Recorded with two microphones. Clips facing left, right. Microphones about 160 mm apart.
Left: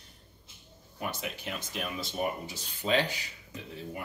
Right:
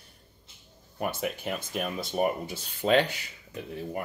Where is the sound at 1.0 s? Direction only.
50° right (ahead or behind).